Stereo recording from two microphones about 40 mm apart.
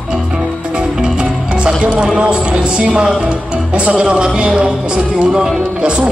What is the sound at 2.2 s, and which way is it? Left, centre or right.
A man's voice, right.